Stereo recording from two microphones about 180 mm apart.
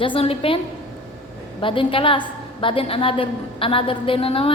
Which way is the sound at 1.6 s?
30° left (ahead or behind).